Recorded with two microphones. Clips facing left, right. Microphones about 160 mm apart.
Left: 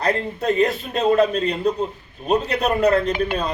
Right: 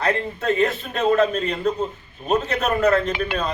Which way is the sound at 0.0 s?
35° left (ahead or behind).